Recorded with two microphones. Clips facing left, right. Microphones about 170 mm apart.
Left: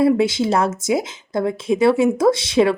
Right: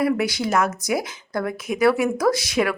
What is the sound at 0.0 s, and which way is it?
Speech, 25° left (ahead or behind).